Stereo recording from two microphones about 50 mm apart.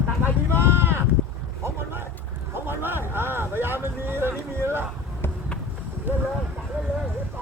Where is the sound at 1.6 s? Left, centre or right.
Right.